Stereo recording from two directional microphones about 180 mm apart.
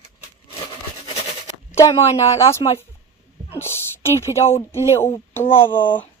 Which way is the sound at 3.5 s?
15° left (ahead or behind).